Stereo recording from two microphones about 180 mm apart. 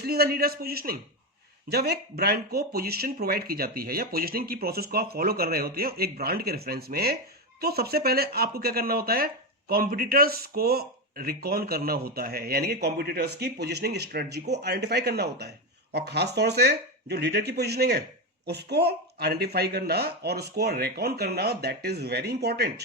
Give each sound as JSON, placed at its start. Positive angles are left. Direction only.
{"t": 0.0, "sound": "speech", "side_deg": -60}